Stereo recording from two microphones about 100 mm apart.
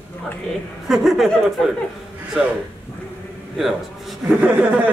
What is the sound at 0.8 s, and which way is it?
Speech, 5° right (ahead or behind).